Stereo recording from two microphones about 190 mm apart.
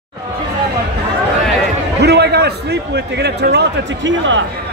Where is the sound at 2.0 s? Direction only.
60° right (ahead or behind).